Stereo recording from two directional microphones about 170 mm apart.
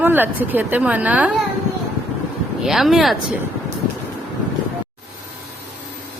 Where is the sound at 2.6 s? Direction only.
Centre (ahead or behind).